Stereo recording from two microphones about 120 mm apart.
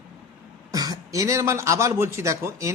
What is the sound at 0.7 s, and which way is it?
A man's voice, 30° right (ahead or behind).